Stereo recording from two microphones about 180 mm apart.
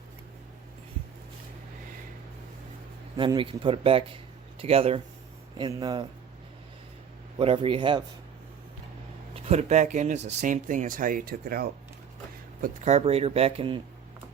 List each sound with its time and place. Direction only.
3.2 s speech: 30° right (ahead or behind)
7.3 s speech: 30° right (ahead or behind)
9.3 s speech: 35° right (ahead or behind); by 11.7 s 55° right (ahead or behind)
12.6 s speech: 40° right (ahead or behind)